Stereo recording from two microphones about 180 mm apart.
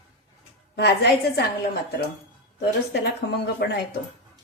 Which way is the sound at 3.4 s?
65° left (ahead or behind).